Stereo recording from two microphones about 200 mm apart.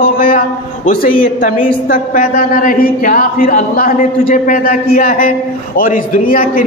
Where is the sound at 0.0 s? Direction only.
45° left (ahead or behind).